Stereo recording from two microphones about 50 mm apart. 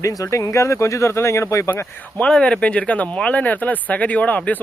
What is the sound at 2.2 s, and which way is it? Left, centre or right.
Speech, centre.